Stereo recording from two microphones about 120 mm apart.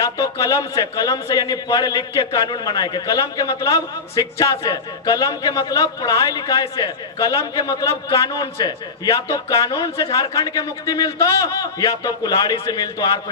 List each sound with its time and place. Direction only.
0.0 s a man's voice: 30° left (ahead or behind)